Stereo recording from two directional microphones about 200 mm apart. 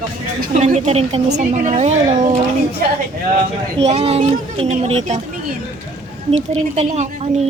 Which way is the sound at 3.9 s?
30° right (ahead or behind).